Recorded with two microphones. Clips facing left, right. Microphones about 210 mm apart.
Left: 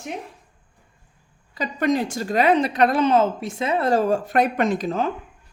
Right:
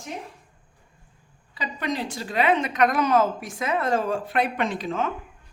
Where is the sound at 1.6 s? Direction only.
45° left (ahead or behind).